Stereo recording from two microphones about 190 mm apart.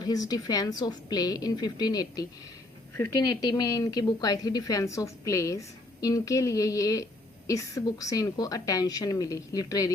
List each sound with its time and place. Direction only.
0.0 s a woman's voice: 20° left (ahead or behind)